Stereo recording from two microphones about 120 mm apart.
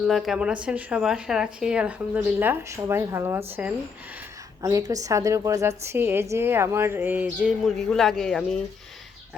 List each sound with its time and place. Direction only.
0.1 s speech: centre (ahead or behind); by 3.4 s 25° right (ahead or behind)
4.6 s speech: 30° right (ahead or behind); by 7.5 s 15° right (ahead or behind)
7.6 s speech: centre (ahead or behind)